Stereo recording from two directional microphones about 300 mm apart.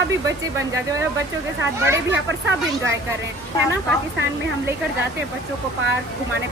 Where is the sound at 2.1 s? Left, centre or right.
Right.